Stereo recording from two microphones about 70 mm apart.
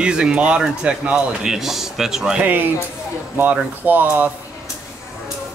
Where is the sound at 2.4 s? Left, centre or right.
Right.